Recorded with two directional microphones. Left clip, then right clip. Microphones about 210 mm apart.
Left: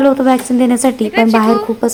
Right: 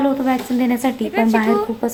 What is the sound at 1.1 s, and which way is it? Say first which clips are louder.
Speech: left 5 dB; 10° right (ahead or behind).